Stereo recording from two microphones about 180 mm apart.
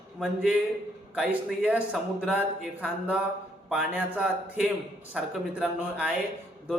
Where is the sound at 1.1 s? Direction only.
5° right (ahead or behind).